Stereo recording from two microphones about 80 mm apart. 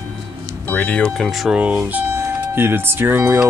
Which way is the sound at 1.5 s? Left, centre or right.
Centre.